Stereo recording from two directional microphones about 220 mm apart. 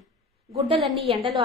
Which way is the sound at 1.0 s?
25° right (ahead or behind).